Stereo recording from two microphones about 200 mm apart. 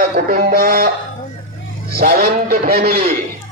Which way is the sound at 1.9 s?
50° right (ahead or behind).